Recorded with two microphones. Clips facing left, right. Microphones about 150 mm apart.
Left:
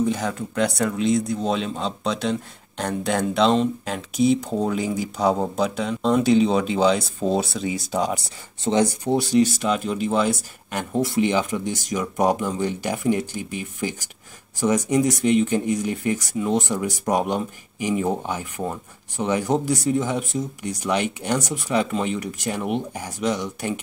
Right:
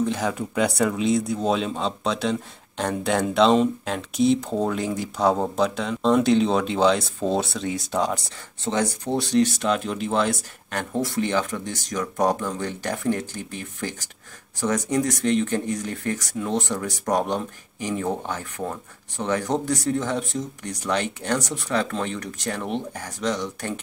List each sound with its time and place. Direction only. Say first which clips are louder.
0.0 s speech: left 1 dB; centre (ahead or behind)
8.6 s speech: left 4 dB; 15° left (ahead or behind)
9.1 s speech: left 1 dB; 5° left (ahead or behind)